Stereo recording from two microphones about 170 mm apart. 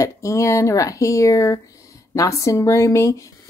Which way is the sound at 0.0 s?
20° left (ahead or behind).